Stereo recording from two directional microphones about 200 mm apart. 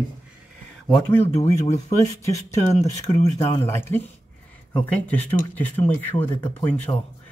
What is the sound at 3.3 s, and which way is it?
Speech, 15° left (ahead or behind).